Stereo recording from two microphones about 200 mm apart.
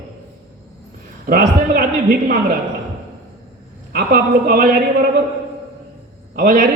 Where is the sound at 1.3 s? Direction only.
45° right (ahead or behind).